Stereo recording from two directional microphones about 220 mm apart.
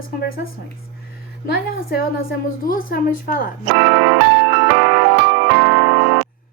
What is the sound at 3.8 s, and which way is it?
Music, 45° right (ahead or behind).